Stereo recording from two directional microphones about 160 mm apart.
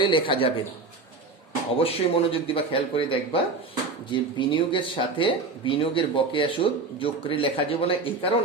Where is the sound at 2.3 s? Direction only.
35° left (ahead or behind).